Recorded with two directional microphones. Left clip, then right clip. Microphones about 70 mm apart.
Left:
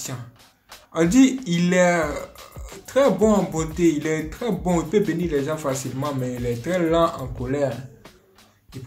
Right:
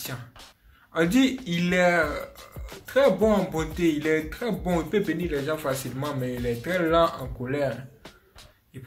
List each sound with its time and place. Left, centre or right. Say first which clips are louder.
0.9 s speech: left 5 dB; left
4.1 s speech: left 1 dB; left